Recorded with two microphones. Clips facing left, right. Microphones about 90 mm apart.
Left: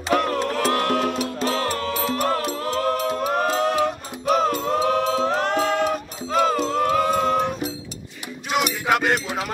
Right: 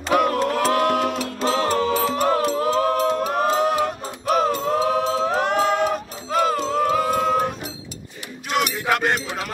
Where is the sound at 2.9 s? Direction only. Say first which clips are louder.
Right 3 dB; 30° right (ahead or behind).